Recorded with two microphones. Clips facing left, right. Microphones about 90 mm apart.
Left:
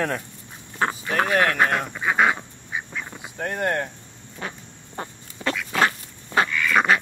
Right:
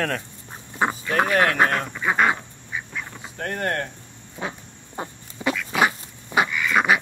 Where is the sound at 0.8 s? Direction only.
15° right (ahead or behind).